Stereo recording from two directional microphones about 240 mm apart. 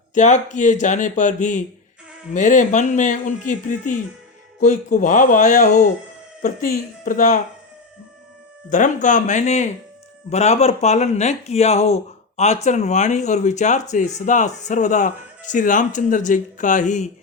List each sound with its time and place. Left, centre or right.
0.1 s speech: left
8.7 s speech: left